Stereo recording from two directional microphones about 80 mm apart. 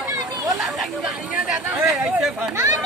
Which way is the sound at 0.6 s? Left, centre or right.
Centre.